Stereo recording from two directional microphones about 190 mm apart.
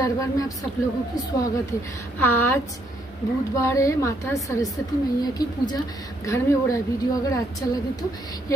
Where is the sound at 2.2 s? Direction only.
10° left (ahead or behind).